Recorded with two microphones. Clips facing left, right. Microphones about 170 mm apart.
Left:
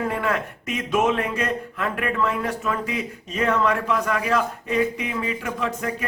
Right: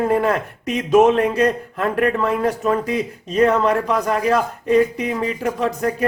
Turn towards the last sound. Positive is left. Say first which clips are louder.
# right 6 dB
turn(degrees=-40)  # may be behind; listen again after turning